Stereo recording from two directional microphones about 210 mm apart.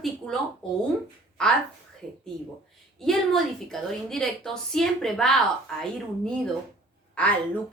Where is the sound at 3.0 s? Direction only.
Centre (ahead or behind).